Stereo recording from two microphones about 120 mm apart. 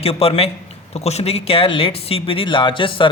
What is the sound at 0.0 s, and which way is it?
A man's voice, 55° left (ahead or behind).